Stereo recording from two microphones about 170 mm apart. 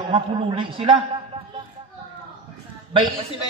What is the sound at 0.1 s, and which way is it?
Speech, 30° right (ahead or behind).